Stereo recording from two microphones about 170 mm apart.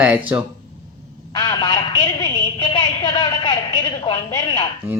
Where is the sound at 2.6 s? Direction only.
25° left (ahead or behind).